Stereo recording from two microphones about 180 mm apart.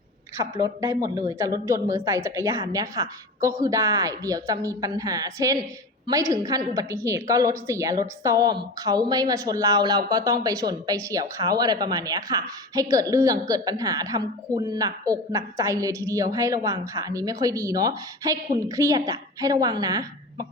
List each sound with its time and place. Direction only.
0.3 s a woman's voice: 15° right (ahead or behind)